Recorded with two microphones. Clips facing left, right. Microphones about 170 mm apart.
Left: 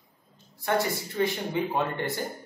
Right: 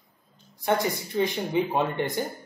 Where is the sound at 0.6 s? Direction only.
20° right (ahead or behind).